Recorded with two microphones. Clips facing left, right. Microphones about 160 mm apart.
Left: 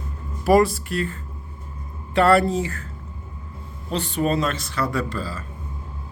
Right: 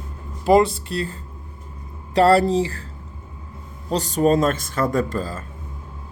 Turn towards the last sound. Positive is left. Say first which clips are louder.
# right 4 dB
turn(degrees=-45)  # may be behind; listen again after turning